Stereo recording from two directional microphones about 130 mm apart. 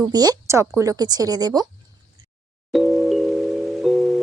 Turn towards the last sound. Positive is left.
turn(degrees=0)  # may be behind; listen again after turning